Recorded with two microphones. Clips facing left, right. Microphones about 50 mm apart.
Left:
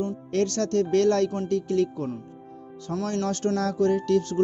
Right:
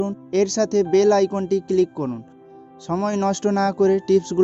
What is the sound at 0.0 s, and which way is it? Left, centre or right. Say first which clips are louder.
Speech: right 5 dB; right.